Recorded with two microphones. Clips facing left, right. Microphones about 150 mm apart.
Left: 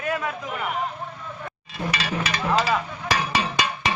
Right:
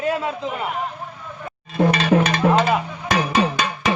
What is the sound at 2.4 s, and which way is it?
Music, 65° right (ahead or behind).